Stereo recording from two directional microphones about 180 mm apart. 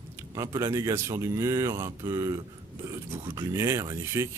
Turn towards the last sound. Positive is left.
turn(degrees=-15)  # may be behind; listen again after turning